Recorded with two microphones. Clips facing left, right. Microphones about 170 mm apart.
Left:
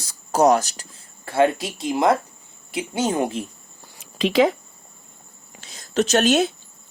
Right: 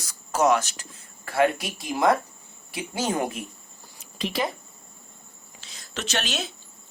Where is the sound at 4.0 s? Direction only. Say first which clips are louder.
Left 10 dB; 90° left.